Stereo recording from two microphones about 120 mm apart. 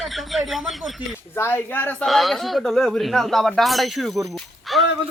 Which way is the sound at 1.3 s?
20° left (ahead or behind).